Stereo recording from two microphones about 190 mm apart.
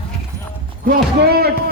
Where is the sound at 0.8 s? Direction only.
55° right (ahead or behind).